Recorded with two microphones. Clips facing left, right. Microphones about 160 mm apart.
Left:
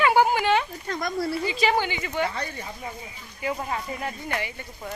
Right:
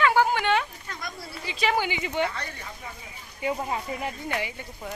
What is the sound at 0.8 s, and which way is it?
Speech, 40° left (ahead or behind).